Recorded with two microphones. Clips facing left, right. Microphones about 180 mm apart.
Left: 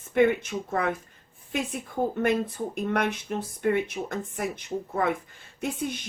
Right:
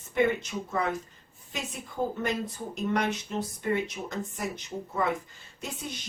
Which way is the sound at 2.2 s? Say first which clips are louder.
Left 6 dB; 55° left (ahead or behind).